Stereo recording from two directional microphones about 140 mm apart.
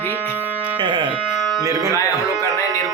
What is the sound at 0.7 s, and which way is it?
Speech, 35° right (ahead or behind).